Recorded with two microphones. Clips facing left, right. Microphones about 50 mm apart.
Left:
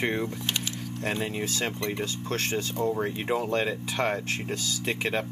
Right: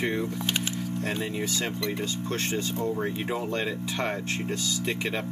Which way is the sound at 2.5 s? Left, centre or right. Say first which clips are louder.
Left 2 dB; centre.